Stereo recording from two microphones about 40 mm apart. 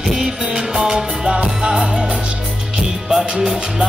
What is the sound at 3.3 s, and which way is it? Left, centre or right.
Music, right.